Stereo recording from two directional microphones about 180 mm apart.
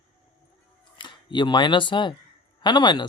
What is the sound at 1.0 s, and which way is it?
Speech, 25° left (ahead or behind).